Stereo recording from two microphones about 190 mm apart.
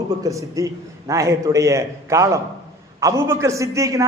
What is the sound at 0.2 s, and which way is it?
A man's voice, 15° right (ahead or behind).